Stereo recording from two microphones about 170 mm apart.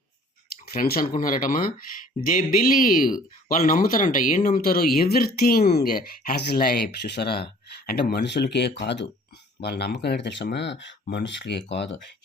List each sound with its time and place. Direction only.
0.7 s speech: 60° left (ahead or behind); by 9.0 s 90° left
9.6 s speech: 75° left (ahead or behind); by 11.9 s 90° left